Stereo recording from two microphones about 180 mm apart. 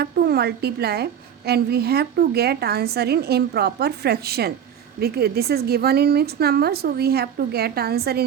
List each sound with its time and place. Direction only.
0.0 s a woman's voice: 60° right (ahead or behind)